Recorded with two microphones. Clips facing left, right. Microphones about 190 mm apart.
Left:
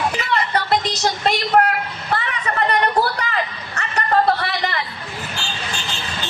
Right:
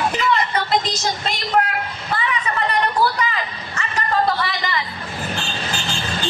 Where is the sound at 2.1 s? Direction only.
60° left (ahead or behind).